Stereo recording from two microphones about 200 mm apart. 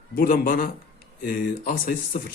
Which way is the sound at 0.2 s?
45° left (ahead or behind).